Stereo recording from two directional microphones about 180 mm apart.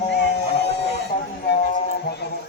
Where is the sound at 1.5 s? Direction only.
70° left (ahead or behind).